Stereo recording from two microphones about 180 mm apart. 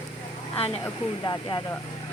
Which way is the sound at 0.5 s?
35° left (ahead or behind).